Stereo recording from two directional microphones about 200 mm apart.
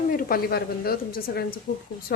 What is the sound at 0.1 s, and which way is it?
A woman's voice, 45° left (ahead or behind).